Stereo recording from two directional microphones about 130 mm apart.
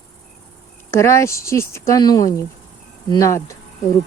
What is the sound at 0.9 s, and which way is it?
Speech, 20° left (ahead or behind).